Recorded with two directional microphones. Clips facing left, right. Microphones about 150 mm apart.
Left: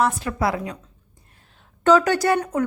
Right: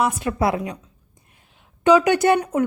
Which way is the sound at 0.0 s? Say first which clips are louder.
Right 1 dB; 20° right (ahead or behind).